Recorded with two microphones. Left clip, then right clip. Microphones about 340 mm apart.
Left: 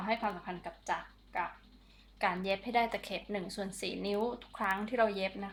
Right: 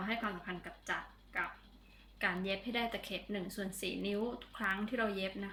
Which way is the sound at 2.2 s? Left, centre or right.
Centre.